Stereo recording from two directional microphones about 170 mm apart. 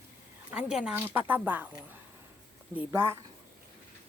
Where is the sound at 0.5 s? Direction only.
5° right (ahead or behind).